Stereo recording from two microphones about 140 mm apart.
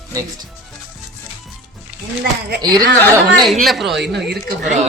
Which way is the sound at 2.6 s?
30° right (ahead or behind).